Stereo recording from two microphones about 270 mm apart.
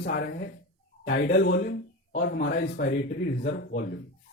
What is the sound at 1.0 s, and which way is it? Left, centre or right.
A man's voice, left.